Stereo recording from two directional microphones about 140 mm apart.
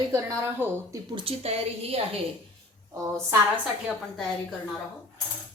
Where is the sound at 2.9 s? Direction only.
25° right (ahead or behind).